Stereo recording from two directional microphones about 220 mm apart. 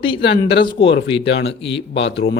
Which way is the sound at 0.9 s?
50° left (ahead or behind).